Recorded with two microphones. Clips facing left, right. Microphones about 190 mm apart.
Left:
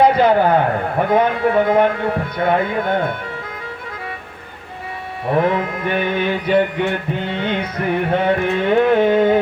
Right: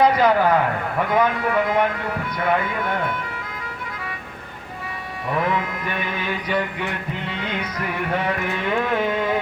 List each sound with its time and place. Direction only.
0.0 s mantra: 30° left (ahead or behind)
5.3 s mantra: 30° left (ahead or behind)